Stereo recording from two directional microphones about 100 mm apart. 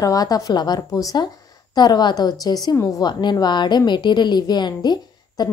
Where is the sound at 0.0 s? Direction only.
40° left (ahead or behind).